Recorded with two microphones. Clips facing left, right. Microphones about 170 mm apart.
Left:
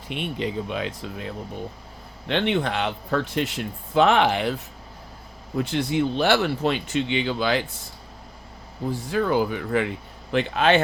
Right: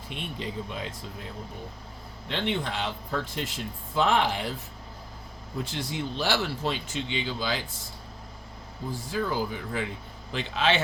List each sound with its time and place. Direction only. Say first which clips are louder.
0.1 s speech: left 8 dB; 70° left (ahead or behind)
5.5 s speech: left 9 dB; 65° left (ahead or behind)
8.9 s speech: left 7 dB; 65° left (ahead or behind)
10.3 s speech: left 7 dB; 55° left (ahead or behind)